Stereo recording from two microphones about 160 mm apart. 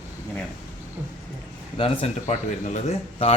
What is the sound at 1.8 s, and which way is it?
Speech, 45° left (ahead or behind).